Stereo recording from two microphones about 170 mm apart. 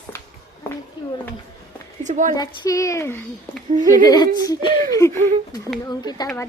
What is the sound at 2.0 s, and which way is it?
Speech, 45° right (ahead or behind).